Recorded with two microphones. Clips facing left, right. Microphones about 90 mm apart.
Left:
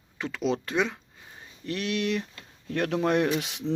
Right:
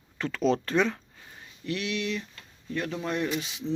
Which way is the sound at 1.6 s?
45° left (ahead or behind).